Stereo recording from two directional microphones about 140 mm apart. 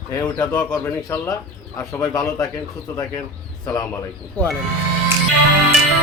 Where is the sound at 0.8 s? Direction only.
20° left (ahead or behind).